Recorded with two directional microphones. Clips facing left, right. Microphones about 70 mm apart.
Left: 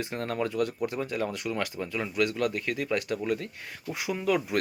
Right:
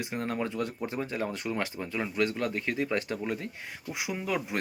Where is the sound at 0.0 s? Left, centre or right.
Centre.